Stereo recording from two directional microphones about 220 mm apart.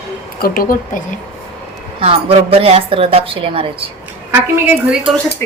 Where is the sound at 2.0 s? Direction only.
25° right (ahead or behind).